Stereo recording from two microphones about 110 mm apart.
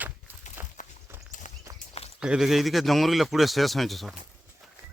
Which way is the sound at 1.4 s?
90° left.